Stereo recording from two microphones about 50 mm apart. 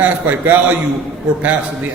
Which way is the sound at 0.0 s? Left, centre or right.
Right.